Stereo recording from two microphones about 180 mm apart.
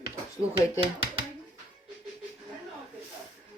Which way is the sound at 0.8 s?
30° right (ahead or behind).